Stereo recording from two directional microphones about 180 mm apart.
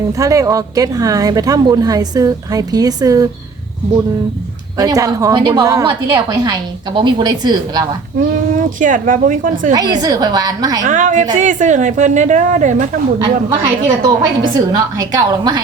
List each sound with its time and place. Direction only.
0.1 s speech: 20° right (ahead or behind)
4.8 s speech: 20° right (ahead or behind)
8.8 s a woman's voice: 45° right (ahead or behind)
9.7 s speech: 20° right (ahead or behind)
10.8 s a woman's voice: 45° right (ahead or behind)
13.2 s speech: 25° right (ahead or behind)